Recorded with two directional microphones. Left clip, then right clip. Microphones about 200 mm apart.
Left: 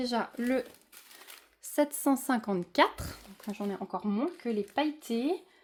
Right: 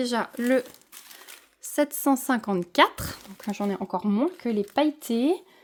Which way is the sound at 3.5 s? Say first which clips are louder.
Right 7 dB; 60° right (ahead or behind).